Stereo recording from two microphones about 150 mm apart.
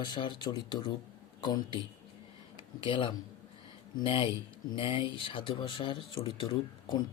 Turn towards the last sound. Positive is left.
turn(degrees=35)  # may be behind; listen again after turning